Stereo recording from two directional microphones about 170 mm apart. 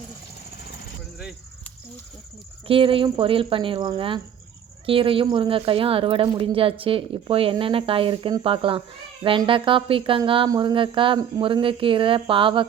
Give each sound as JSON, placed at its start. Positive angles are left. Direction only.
{"t": 2.6, "sound": "speech", "side_deg": -30}